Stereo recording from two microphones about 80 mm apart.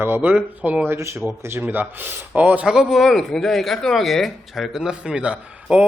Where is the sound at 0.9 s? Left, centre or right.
Right; by 2.6 s centre.